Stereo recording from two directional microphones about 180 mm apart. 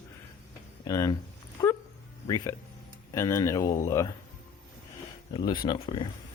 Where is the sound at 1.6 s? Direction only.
20° left (ahead or behind).